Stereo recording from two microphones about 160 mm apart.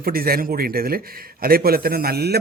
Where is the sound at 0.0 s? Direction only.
65° right (ahead or behind).